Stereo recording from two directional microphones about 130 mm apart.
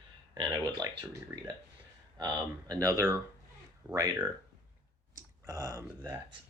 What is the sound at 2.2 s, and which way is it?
Speech, 30° right (ahead or behind).